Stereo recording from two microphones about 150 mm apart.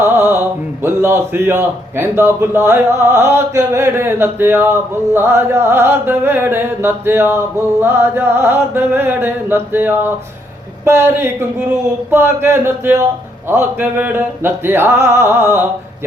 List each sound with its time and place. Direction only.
0.0 s mantra: 15° right (ahead or behind)
0.8 s a man's voice: 15° right (ahead or behind)